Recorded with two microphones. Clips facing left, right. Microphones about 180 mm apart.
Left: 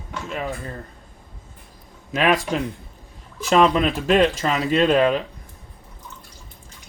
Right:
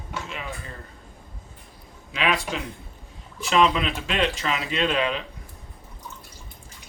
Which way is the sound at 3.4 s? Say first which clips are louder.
Left 4 dB; 45° left (ahead or behind).